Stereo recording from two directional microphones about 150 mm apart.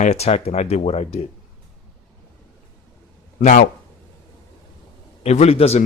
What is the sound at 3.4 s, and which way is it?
Speech, 60° left (ahead or behind).